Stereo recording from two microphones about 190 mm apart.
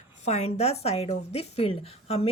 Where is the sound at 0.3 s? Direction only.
35° left (ahead or behind).